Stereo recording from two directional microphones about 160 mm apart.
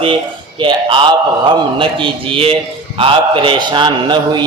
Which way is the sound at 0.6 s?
30° right (ahead or behind).